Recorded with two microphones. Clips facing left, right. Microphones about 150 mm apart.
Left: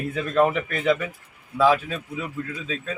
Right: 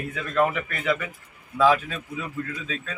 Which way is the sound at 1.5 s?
10° left (ahead or behind).